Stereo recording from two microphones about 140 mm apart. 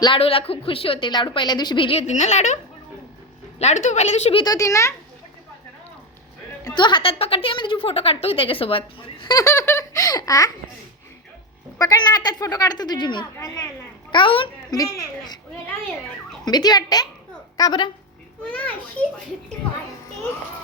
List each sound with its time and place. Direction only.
0.0 s a woman's voice: 40° left (ahead or behind)
3.6 s a woman's voice: 55° left (ahead or behind)
4.4 s a woman's voice: 20° left (ahead or behind)
6.7 s a woman's voice: 35° left (ahead or behind)
9.3 s a woman's voice: 20° left (ahead or behind)
11.8 s a woman's voice: 30° left (ahead or behind)
14.8 s a woman's voice: 25° left (ahead or behind)
16.5 s a woman's voice: 30° left (ahead or behind)
18.4 s a child's voice: 10° left (ahead or behind)